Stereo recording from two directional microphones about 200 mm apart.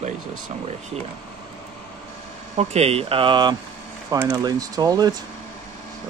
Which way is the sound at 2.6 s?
30° right (ahead or behind).